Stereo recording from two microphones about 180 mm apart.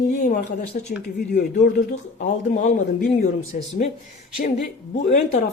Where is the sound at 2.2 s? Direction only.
45° left (ahead or behind).